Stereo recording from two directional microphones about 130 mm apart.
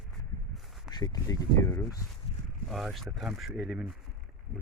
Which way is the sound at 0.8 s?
30° left (ahead or behind).